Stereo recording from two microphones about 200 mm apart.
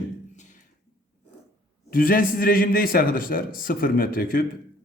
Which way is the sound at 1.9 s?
45° left (ahead or behind).